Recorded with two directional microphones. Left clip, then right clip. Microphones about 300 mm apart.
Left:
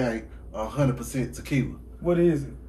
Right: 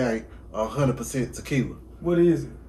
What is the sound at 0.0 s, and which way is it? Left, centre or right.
Speech, centre.